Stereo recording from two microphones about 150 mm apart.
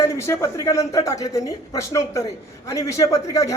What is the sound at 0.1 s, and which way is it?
Speech, 20° left (ahead or behind).